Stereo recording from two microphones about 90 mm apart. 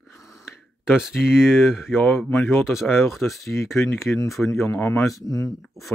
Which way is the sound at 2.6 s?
Centre (ahead or behind).